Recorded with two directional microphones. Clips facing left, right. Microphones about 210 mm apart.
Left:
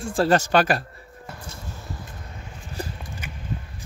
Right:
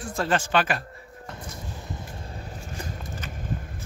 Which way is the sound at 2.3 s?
35° right (ahead or behind).